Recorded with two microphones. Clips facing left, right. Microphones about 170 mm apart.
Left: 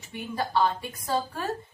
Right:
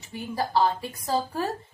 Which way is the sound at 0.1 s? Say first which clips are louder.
Right 2 dB; 30° right (ahead or behind).